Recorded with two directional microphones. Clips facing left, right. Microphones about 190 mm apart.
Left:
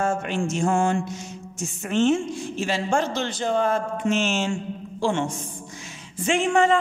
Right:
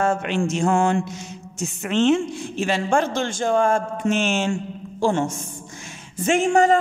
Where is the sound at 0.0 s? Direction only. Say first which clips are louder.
Right 3 dB; 70° right (ahead or behind).